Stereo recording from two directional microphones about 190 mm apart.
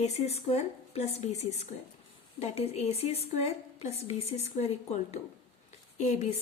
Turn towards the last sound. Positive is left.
turn(degrees=35)  # may be behind; listen again after turning